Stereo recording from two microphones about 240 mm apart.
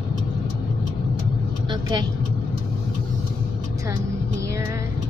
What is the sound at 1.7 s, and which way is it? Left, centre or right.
Vehicle, centre.